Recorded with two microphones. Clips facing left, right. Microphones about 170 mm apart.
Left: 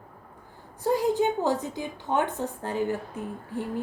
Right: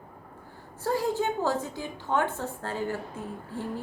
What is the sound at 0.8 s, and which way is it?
A woman's voice, 15° left (ahead or behind).